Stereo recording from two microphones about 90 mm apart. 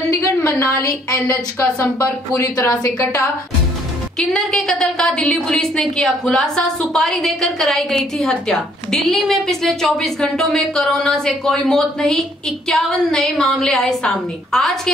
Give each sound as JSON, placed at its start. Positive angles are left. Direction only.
{"t": 0.1, "sound": "a woman's voice", "side_deg": 35}
{"t": 4.3, "sound": "a woman's voice", "side_deg": 5}